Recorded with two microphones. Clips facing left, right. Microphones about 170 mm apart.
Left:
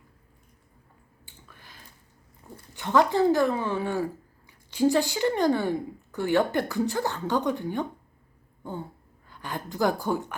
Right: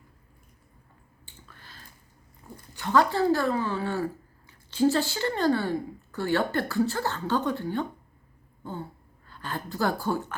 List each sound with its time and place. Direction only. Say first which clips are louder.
1.2 s finger snapping: even; 15° left (ahead or behind)
2.7 s speech: left 1 dB; 20° left (ahead or behind)
9.2 s a woman's voice: even; 15° left (ahead or behind)